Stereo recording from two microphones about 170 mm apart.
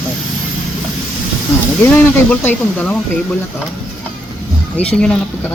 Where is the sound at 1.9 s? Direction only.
10° left (ahead or behind).